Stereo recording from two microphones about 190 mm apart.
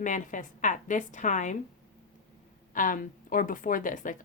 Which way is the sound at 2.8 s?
45° left (ahead or behind).